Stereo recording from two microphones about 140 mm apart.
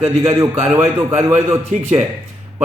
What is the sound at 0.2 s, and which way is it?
Speech, 20° right (ahead or behind).